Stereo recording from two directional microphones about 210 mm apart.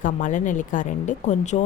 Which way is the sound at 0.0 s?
35° left (ahead or behind).